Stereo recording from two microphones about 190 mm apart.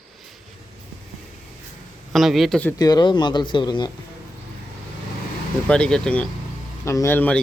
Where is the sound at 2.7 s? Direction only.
20° left (ahead or behind).